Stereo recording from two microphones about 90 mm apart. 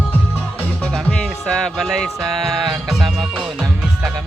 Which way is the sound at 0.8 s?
10° left (ahead or behind).